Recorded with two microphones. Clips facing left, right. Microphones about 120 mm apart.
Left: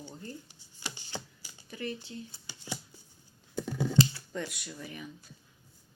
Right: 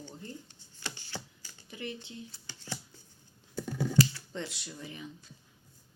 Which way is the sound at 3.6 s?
25° left (ahead or behind).